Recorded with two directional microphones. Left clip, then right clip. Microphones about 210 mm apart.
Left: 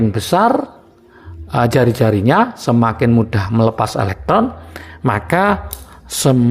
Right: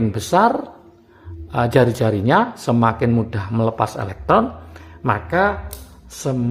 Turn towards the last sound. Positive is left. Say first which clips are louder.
# left 9 dB
turn(degrees=30)  # may be behind; listen again after turning